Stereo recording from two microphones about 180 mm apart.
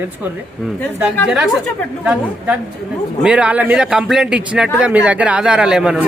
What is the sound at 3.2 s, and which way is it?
Speech, 5° right (ahead or behind).